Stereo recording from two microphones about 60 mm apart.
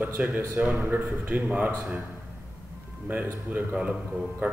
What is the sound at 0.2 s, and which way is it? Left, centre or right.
A man's voice, right.